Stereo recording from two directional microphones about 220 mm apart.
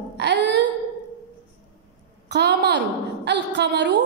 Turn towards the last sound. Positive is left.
turn(degrees=-50)  # may be behind; listen again after turning